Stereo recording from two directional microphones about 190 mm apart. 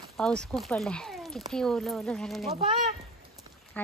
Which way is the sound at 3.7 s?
10° left (ahead or behind).